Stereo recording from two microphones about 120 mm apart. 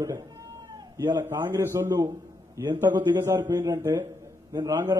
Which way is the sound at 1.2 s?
20° right (ahead or behind).